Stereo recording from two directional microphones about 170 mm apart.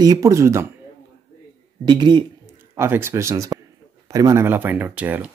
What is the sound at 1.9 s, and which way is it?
Speech, 25° right (ahead or behind).